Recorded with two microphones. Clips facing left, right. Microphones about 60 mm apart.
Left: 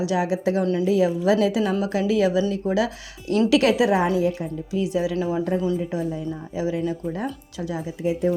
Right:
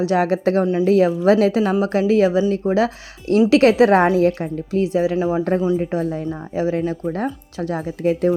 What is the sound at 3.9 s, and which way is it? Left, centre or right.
Speech, right.